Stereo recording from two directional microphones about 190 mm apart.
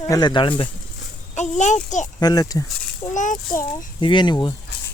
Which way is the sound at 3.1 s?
40° left (ahead or behind).